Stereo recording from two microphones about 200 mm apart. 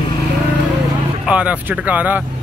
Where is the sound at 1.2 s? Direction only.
5° right (ahead or behind).